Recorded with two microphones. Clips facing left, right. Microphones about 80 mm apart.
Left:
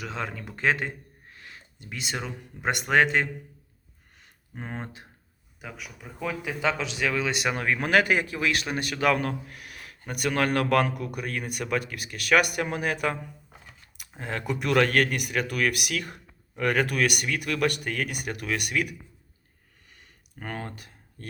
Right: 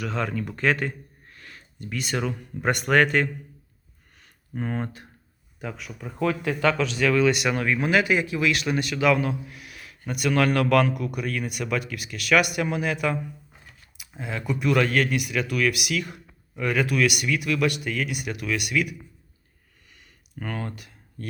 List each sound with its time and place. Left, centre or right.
0.0 s speech: left
4.2 s a sound: centre
5.5 s a man's voice: centre
6.7 s a man's voice: centre
7.3 s a man's voice: left
7.8 s a man's voice: left
14.2 s speech: left
19.9 s a sound: left